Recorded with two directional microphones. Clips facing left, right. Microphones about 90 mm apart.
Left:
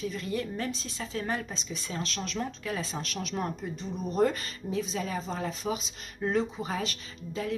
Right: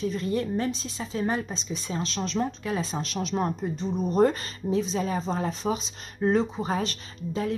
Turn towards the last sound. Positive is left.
turn(degrees=-35)  # may be behind; listen again after turning